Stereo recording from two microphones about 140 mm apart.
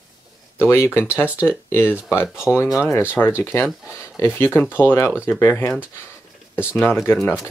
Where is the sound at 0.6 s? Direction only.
20° left (ahead or behind).